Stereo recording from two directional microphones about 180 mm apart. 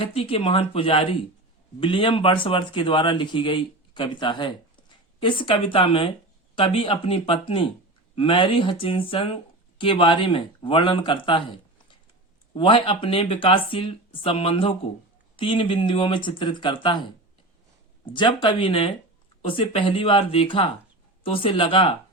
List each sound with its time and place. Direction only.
0.0 s speech: 30° left (ahead or behind)
18.0 s speech: 25° left (ahead or behind)